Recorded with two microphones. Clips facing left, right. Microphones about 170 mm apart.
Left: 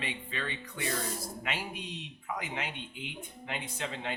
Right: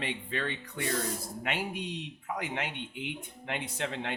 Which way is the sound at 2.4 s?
65° right (ahead or behind).